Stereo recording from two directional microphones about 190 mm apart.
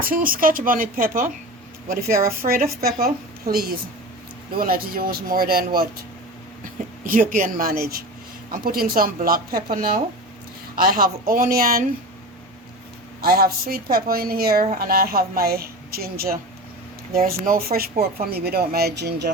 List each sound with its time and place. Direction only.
0.0 s speech: 50° right (ahead or behind)
7.1 s speech: 45° right (ahead or behind)
13.2 s speech: 50° right (ahead or behind)